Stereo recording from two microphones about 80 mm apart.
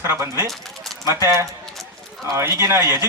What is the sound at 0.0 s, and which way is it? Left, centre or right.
Speech, right.